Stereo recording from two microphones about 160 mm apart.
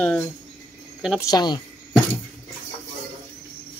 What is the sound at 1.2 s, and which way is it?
Speech, 25° left (ahead or behind).